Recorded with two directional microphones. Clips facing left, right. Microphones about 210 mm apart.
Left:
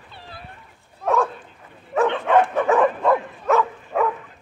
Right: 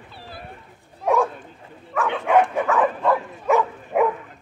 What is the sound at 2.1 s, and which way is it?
Dog, 10° right (ahead or behind).